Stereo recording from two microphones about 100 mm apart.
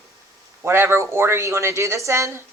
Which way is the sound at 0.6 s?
25° right (ahead or behind).